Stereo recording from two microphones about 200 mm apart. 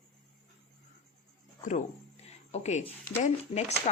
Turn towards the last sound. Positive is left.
turn(degrees=35)  # may be behind; listen again after turning